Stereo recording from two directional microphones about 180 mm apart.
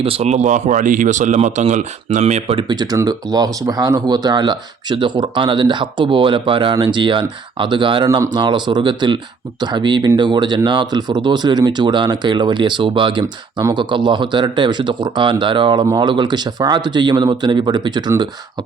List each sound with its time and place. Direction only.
0.0 s speech: 35° right (ahead or behind)